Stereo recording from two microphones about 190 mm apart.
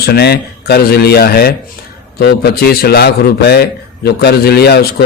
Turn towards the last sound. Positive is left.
turn(degrees=55)  # may be behind; listen again after turning